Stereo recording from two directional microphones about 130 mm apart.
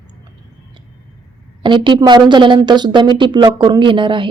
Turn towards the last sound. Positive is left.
turn(degrees=-40)  # may be behind; listen again after turning